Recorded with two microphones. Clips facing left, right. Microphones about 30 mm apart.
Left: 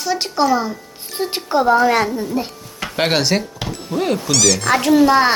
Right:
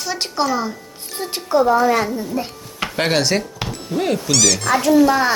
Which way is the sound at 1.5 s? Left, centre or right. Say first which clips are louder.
Right 1 dB; left.